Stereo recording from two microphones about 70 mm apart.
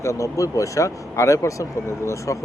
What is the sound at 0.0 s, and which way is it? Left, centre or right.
Speech, left.